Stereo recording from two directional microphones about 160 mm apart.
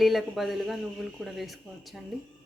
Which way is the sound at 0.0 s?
Centre (ahead or behind).